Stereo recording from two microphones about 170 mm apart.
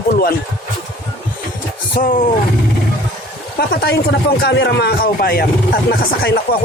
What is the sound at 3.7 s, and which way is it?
Speech, 70° left (ahead or behind).